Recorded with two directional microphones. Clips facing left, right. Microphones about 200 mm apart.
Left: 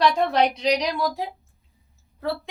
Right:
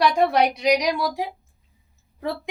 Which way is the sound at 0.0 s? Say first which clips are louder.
Right 1 dB; 10° right (ahead or behind).